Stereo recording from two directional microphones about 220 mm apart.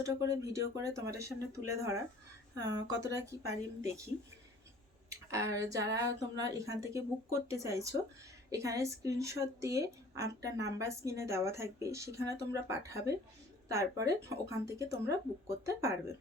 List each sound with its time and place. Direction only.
0.0 s a woman's voice: 15° right (ahead or behind)
5.0 s a woman's voice: 15° right (ahead or behind)